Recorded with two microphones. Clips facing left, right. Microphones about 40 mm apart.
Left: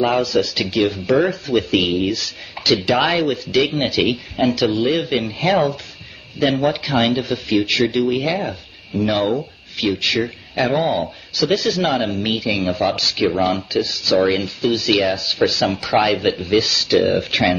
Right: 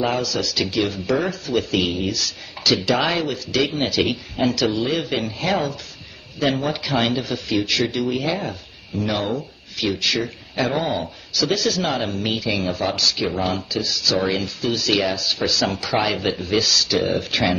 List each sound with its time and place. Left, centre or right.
0.0 s speech: left
10.7 s speech: centre
12.9 s speech: left
13.4 s speech: centre
16.6 s speech: left